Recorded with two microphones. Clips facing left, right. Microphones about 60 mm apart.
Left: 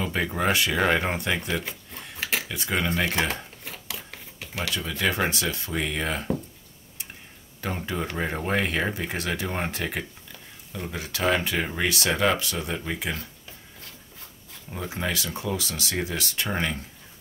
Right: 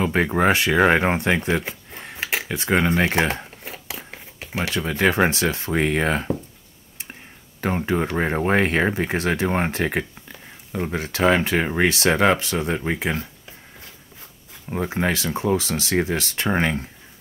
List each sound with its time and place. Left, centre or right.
0.0 s speech: right
1.6 s a sound: right
2.4 s crumpling: right
5.3 s speech: right
7.6 s speech: right
14.7 s speech: right